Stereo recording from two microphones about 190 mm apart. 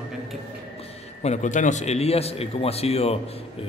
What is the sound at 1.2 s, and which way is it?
A man's voice, 40° left (ahead or behind).